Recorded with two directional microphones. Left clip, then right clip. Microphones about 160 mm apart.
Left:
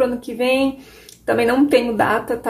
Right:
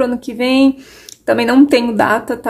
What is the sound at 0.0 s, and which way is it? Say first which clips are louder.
A woman's voice: right 2 dB; 60° right (ahead or behind).